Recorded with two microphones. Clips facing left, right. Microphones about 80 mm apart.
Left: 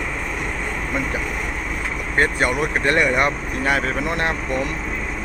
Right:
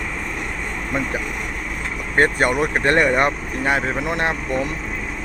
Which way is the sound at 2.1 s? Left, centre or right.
Right.